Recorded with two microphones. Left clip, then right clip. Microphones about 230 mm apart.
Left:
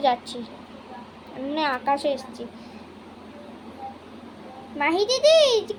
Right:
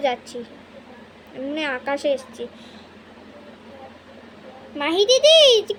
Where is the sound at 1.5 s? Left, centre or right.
Centre.